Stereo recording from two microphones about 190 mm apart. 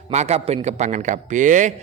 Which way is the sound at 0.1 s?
35° right (ahead or behind).